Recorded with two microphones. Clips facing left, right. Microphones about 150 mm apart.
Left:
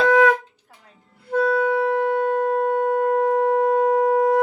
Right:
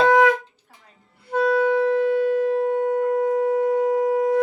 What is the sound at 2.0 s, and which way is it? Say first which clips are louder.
Shofar: right 1 dB; 50° left (ahead or behind).